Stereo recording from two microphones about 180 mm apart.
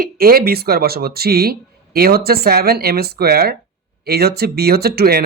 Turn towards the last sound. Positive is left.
turn(degrees=-60)  # may be behind; listen again after turning